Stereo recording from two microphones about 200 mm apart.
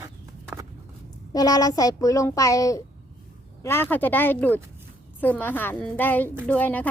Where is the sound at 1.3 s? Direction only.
20° left (ahead or behind).